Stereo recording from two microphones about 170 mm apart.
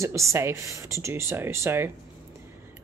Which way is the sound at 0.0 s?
15° right (ahead or behind).